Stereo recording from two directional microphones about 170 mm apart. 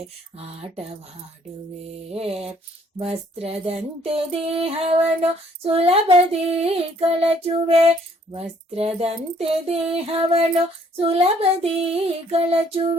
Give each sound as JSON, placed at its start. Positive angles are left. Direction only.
{"t": 0.3, "sound": "child singing", "side_deg": -35}
{"t": 2.1, "sound": "child singing", "side_deg": -35}